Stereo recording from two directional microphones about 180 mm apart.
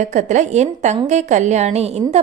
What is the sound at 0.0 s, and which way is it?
A woman's voice, 40° right (ahead or behind).